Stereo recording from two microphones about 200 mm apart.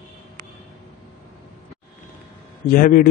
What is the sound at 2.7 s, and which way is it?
Speech, 45° left (ahead or behind).